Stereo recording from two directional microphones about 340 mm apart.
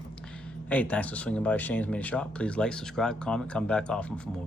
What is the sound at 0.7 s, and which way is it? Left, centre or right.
Speech, centre.